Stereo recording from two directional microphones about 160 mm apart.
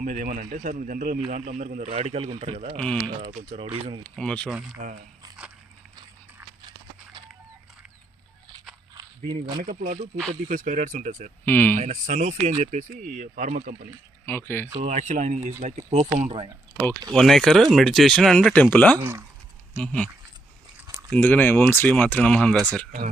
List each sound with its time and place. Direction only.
0.0 s a man's voice: 60° right (ahead or behind); by 2.7 s 45° right (ahead or behind)
2.7 s speech: 5° left (ahead or behind)
3.6 s speech: 35° right (ahead or behind)
4.1 s speech: 5° left (ahead or behind)
6.6 s horse: 25° right (ahead or behind)
9.0 s speech: 25° right (ahead or behind)
9.6 s a man's voice: 50° right (ahead or behind)
11.4 s speech: 10° left (ahead or behind)
11.8 s speech: 50° right (ahead or behind)
14.3 s speech: 15° left (ahead or behind)
14.8 s speech: 50° right (ahead or behind)
17.1 s speech: 5° left (ahead or behind)
21.1 s speech: 10° left (ahead or behind)